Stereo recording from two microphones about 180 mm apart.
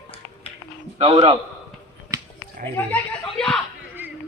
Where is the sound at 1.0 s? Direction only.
30° right (ahead or behind).